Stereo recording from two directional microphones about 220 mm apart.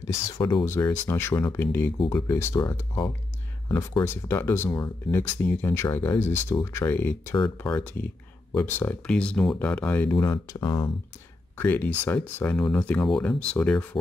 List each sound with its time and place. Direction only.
0.0 s speech: 15° left (ahead or behind)
11.5 s speech: 10° left (ahead or behind)